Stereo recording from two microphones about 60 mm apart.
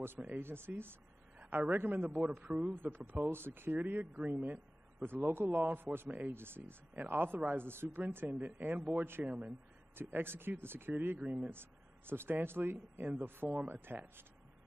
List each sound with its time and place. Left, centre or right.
0.0 s speech: right
1.6 s a man's voice: right
2.7 s a man's voice: right
3.3 s a man's voice: right
9.9 s speech: right
11.1 s a man's voice: right
12.1 s speech: right